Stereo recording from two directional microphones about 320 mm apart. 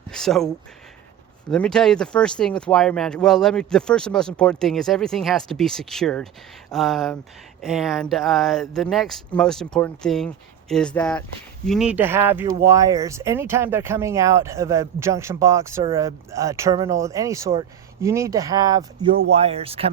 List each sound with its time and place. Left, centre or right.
0.1 s speech: centre